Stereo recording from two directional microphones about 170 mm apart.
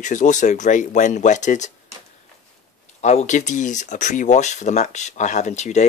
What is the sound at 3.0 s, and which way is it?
Speech, 40° left (ahead or behind).